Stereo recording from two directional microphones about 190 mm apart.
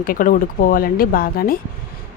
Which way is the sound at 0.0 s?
45° left (ahead or behind).